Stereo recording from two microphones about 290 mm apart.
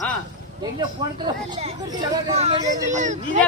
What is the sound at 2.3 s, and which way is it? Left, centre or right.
Speech, centre.